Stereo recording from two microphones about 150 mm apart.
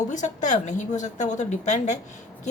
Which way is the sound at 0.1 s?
55° left (ahead or behind).